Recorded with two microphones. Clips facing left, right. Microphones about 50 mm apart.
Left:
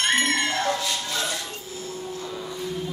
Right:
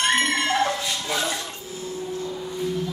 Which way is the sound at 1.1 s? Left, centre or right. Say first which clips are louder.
Right 3 dB; centre.